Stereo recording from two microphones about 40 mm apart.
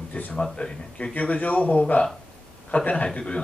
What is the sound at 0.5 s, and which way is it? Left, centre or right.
Speech, left.